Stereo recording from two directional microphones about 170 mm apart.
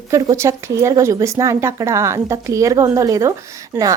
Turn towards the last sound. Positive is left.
turn(degrees=-10)  # may be behind; listen again after turning